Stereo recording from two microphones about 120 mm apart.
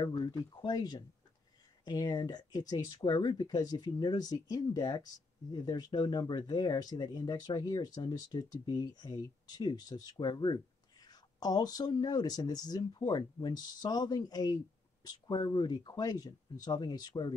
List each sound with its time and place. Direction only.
0.0 s speech: 40° left (ahead or behind)